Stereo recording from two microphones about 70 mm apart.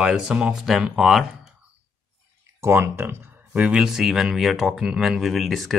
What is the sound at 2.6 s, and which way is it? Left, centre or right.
Speech, right.